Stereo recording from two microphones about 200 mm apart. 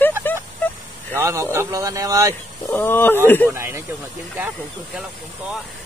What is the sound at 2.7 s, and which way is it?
Speech, 10° left (ahead or behind).